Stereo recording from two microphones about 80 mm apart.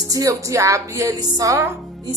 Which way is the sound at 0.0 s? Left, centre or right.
Right.